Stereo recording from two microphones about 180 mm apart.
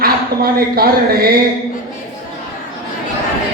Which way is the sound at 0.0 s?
55° right (ahead or behind).